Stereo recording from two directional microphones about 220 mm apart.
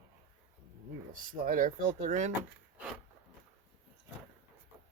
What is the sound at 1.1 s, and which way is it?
Speech, 35° right (ahead or behind).